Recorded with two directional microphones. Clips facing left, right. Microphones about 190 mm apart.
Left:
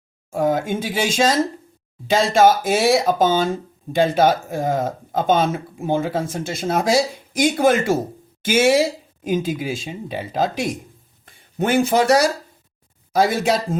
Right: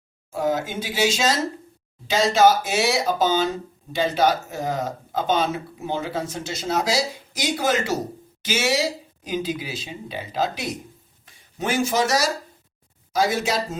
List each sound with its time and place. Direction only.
0.3 s speech: 50° left (ahead or behind)